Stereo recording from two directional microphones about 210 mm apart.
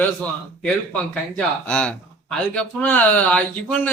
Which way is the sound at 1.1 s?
5° left (ahead or behind).